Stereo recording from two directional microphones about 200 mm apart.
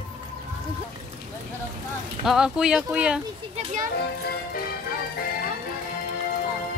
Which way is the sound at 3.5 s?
35° right (ahead or behind).